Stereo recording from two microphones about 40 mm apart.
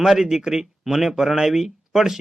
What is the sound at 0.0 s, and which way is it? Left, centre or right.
A man's voice, centre.